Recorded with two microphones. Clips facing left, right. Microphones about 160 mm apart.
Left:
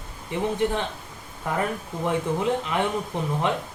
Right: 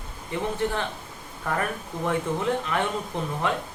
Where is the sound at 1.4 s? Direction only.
20° left (ahead or behind).